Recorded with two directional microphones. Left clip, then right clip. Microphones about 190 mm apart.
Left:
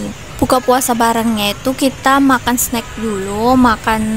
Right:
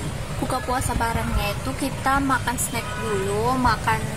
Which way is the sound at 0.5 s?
60° left (ahead or behind).